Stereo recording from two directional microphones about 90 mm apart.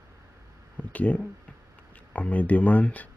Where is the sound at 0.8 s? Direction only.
15° left (ahead or behind).